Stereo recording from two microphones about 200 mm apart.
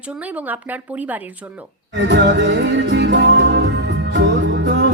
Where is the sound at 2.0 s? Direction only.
60° right (ahead or behind).